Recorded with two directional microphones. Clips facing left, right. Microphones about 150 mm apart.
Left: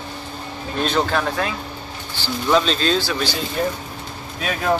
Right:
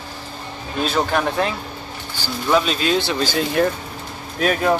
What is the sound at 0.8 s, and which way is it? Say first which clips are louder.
Speech: right 1 dB; 10° right (ahead or behind).